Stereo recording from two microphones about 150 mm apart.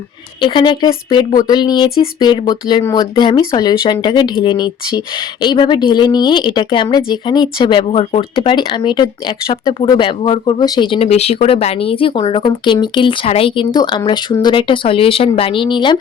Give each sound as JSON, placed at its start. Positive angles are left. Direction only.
{"t": 0.4, "sound": "speech", "side_deg": 30}